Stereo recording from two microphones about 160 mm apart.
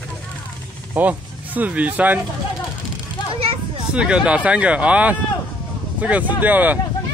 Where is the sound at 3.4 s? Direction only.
35° right (ahead or behind).